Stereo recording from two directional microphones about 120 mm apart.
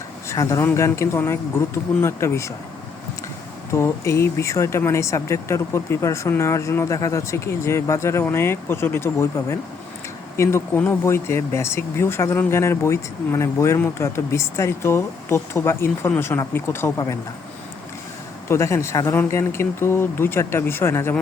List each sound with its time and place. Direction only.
0.3 s speech: 25° left (ahead or behind)
3.7 s speech: 25° left (ahead or behind)
18.4 s speech: 25° left (ahead or behind)